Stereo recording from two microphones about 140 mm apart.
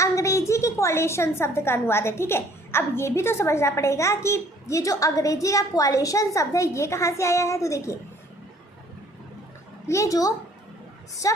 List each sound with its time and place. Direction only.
0.0 s a woman's voice: 20° left (ahead or behind)
9.8 s a woman's voice: 20° left (ahead or behind)